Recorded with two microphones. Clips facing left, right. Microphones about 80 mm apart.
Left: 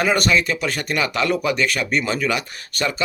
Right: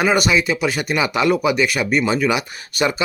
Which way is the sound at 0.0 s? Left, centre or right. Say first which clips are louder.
Right 2 dB; centre.